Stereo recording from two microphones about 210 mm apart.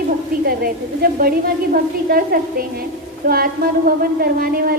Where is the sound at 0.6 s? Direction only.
45° right (ahead or behind).